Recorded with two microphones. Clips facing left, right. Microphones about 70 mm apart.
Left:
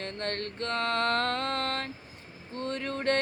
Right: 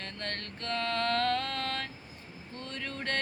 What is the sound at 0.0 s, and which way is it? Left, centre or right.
Mantra, left.